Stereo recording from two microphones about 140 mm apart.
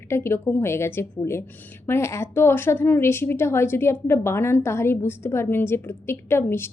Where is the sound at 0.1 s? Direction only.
15° left (ahead or behind).